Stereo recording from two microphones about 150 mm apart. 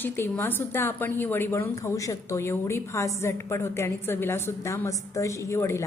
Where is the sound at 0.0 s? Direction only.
15° left (ahead or behind).